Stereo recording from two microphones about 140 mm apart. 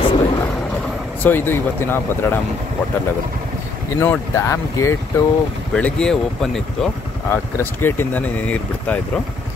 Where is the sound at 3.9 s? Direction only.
20° left (ahead or behind).